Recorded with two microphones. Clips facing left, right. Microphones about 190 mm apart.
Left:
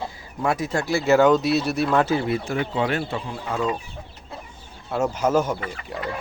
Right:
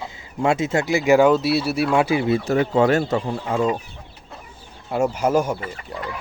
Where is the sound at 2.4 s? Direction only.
40° right (ahead or behind).